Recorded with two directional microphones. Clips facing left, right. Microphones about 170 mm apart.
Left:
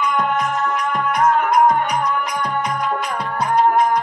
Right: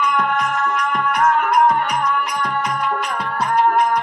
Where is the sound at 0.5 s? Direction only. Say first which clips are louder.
Even; 20° left (ahead or behind).